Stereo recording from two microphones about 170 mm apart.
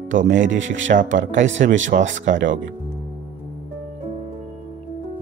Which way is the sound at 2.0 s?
45° right (ahead or behind).